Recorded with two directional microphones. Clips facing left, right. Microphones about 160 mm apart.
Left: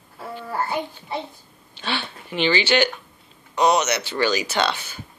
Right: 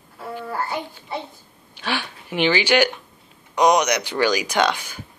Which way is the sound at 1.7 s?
10° right (ahead or behind).